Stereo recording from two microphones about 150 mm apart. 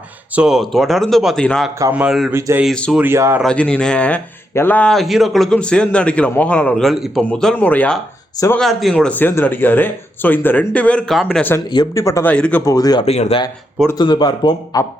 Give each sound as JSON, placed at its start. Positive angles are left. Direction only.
{"t": 0.3, "sound": "speech", "side_deg": -5}
{"t": 1.9, "sound": "speech", "side_deg": -10}
{"t": 2.6, "sound": "speech", "side_deg": 5}
{"t": 2.9, "sound": "speech", "side_deg": -15}
{"t": 3.4, "sound": "speech", "side_deg": 5}
{"t": 11.7, "sound": "a man's voice", "side_deg": 25}
{"t": 12.3, "sound": "speech", "side_deg": 10}
{"t": 12.6, "sound": "a man's voice", "side_deg": 25}
{"t": 13.1, "sound": "speech", "side_deg": 45}
{"t": 14.0, "sound": "a man's voice", "side_deg": 30}